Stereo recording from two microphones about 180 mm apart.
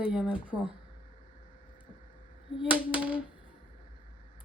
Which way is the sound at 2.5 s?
5° right (ahead or behind).